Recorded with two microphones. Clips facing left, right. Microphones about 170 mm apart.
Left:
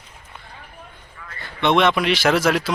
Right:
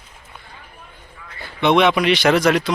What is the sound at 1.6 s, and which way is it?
Speech, centre (ahead or behind).